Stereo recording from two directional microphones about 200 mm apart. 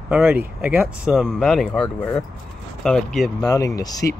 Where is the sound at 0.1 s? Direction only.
5° right (ahead or behind).